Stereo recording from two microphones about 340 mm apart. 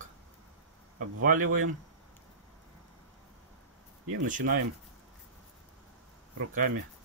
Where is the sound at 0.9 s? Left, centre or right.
Right.